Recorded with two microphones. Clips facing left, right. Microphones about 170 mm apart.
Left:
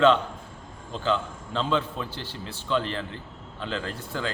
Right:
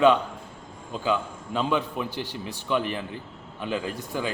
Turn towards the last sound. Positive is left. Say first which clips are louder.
# right 2 dB
turn(degrees=-15)  # may be behind; listen again after turning